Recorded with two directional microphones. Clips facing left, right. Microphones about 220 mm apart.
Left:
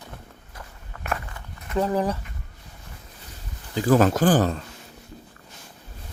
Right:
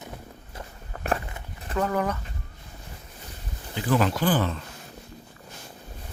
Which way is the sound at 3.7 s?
45° left (ahead or behind).